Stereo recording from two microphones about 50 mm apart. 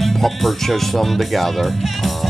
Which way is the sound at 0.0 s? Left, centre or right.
Centre.